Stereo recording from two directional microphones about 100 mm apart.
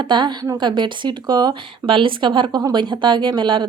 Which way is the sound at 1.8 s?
60° right (ahead or behind).